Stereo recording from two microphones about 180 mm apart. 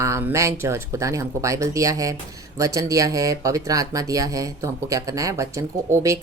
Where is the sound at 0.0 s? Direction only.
15° right (ahead or behind).